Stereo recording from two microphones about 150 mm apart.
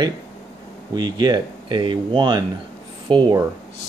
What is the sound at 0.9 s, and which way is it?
Speech, 25° right (ahead or behind).